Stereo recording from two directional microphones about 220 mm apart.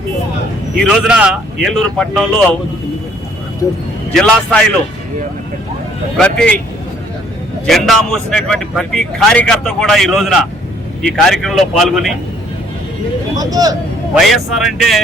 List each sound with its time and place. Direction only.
0.8 s a man's voice: centre (ahead or behind)
4.1 s a man's voice: 5° left (ahead or behind)
6.1 s a man's voice: 5° left (ahead or behind)
7.7 s a man's voice: centre (ahead or behind)
13.3 s speech: 15° right (ahead or behind)
14.2 s a man's voice: centre (ahead or behind)